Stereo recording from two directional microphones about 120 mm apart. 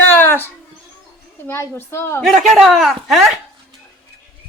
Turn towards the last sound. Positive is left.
turn(degrees=0)  # may be behind; listen again after turning